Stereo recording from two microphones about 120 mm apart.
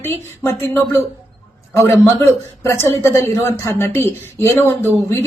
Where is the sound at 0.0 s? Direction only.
20° left (ahead or behind).